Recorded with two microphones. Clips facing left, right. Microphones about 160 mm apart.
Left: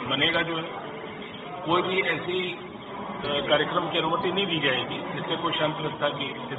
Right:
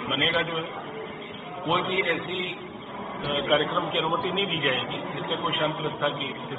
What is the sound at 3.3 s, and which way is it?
A man's voice, centre (ahead or behind).